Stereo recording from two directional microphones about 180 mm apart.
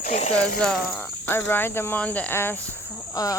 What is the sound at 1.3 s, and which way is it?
Speech, 10° left (ahead or behind).